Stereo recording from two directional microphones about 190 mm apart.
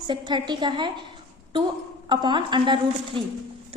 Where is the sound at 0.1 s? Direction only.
25° right (ahead or behind).